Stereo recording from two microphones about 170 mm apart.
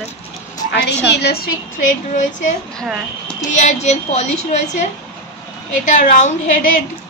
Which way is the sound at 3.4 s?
45° left (ahead or behind).